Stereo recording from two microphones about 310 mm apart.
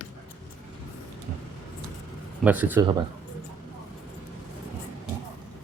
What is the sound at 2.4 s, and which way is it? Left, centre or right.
Speech, centre.